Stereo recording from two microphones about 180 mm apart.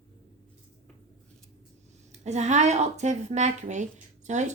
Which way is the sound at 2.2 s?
40° right (ahead or behind).